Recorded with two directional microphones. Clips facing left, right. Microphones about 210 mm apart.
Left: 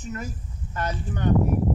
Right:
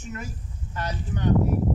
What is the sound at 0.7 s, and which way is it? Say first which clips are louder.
Speech: left 2 dB; 50° left (ahead or behind).